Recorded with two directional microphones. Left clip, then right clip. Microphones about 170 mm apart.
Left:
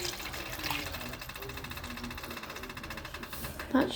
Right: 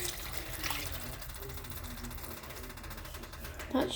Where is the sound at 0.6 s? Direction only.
15° right (ahead or behind).